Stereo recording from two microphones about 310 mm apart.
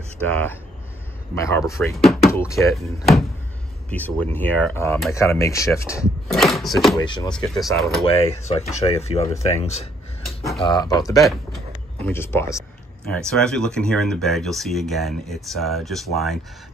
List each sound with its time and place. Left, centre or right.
0.3 s speech: centre
7.0 s speech: centre
7.2 s speech: centre
8.0 s speech: centre
10.2 s a sound: centre
10.6 s speech: centre